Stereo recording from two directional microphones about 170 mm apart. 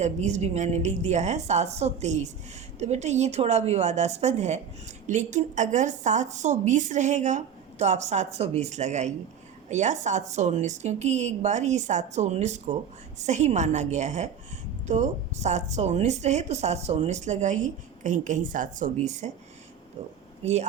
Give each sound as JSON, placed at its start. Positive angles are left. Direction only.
{"t": 0.0, "sound": "a woman's voice", "side_deg": -45}